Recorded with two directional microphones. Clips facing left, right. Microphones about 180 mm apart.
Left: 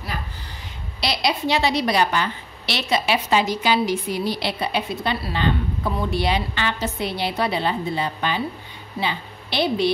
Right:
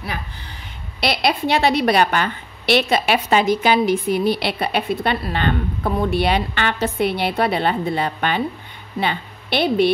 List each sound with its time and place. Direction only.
1.0 s a woman's voice: 55° right (ahead or behind)